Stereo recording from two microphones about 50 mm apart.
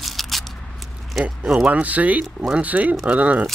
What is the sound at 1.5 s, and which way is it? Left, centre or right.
Speech, right.